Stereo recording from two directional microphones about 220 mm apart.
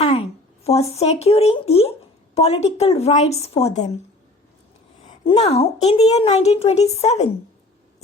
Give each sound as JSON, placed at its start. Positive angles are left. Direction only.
{"t": 0.0, "sound": "a woman's voice", "side_deg": 30}
{"t": 5.0, "sound": "a woman's voice", "side_deg": 25}